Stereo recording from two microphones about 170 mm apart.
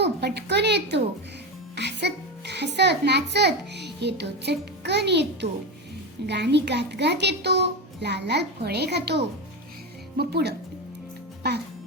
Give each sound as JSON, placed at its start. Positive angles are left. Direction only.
{"t": 0.0, "sound": "a woman's voice", "side_deg": -80}